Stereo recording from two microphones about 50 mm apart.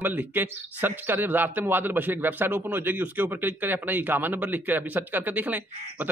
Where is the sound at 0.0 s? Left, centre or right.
Right.